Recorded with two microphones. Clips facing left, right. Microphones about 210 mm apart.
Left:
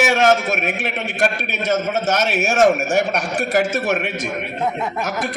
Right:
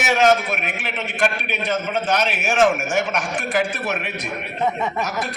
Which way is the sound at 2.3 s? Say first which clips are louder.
Left 4 dB; 40° left (ahead or behind).